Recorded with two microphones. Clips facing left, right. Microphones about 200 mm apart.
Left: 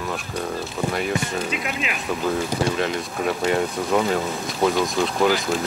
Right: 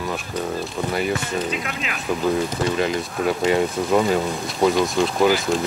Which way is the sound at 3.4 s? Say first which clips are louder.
Right 3 dB; 5° right (ahead or behind).